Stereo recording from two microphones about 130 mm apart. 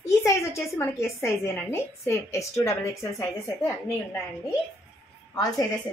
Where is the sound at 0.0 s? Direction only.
20° left (ahead or behind).